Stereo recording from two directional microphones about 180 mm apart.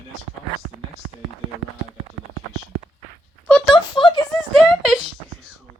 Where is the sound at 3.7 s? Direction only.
25° left (ahead or behind).